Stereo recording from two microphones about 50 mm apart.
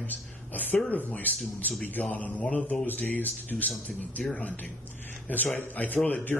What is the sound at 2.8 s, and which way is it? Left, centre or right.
Speech, left.